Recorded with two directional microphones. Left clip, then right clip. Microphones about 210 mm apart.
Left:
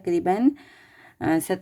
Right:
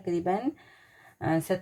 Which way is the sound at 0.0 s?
45° left (ahead or behind).